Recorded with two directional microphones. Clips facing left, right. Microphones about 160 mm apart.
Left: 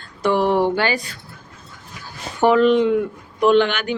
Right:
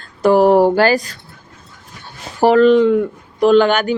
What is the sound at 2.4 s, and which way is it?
Speech, 35° right (ahead or behind).